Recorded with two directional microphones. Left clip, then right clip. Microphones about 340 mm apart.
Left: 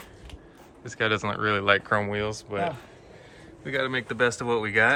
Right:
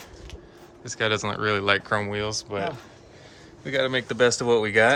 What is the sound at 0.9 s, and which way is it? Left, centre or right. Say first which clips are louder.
Speech: right 1 dB; centre.